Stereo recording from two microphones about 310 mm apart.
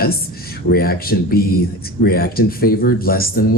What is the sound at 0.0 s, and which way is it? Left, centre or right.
Speech, left.